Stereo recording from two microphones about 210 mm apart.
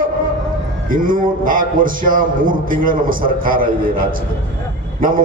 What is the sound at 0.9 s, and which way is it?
A man's voice, 40° right (ahead or behind).